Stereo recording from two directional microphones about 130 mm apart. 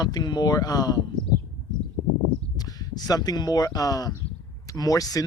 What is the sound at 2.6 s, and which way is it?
Speech, 30° left (ahead or behind).